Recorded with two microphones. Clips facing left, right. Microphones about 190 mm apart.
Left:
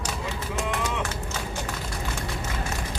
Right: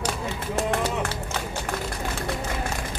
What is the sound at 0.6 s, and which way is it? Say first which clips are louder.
Speech: right 4 dB; 35° right (ahead or behind).